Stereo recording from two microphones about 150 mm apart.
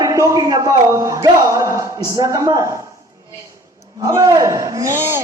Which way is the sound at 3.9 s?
20° right (ahead or behind).